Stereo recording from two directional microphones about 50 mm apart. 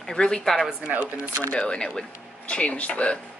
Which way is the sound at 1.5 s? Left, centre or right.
Left.